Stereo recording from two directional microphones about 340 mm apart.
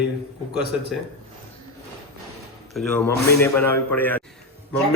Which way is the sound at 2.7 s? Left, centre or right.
Centre.